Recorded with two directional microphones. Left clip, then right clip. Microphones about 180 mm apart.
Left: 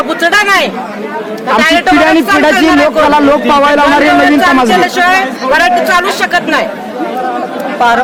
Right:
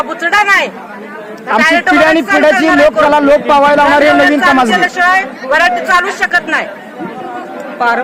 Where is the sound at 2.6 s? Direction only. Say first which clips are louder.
Even; 65° right (ahead or behind).